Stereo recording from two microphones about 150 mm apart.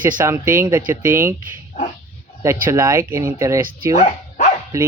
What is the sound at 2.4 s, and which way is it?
Speech, 20° right (ahead or behind).